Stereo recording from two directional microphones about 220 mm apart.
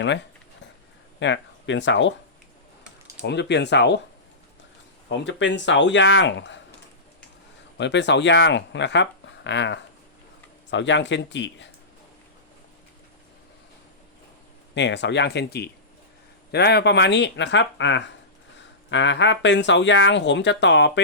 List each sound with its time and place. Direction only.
1.2 s speech: 55° left (ahead or behind)
3.2 s speech: 50° left (ahead or behind)
5.0 s speech: 55° left (ahead or behind)
7.8 s speech: 55° left (ahead or behind)
14.8 s speech: 55° left (ahead or behind)